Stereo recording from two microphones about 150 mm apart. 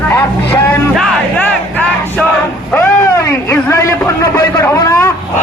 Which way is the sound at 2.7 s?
15° left (ahead or behind).